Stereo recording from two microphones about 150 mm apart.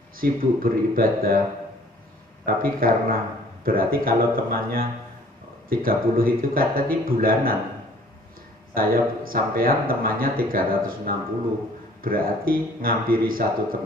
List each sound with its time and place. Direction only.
0.2 s speech: 75° right (ahead or behind)
2.4 s speech: 75° right (ahead or behind)
8.7 s speech: 80° right